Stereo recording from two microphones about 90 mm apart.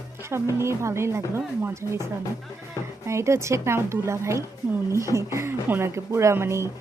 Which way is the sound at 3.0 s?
30° right (ahead or behind).